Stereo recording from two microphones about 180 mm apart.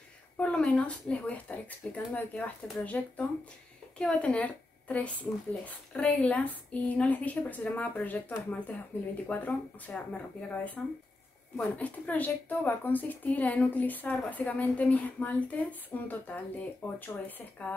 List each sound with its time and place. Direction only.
0.4 s a woman's voice: 5° left (ahead or behind)